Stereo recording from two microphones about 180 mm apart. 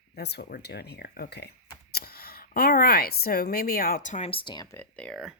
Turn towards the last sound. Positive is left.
turn(degrees=0)  # may be behind; listen again after turning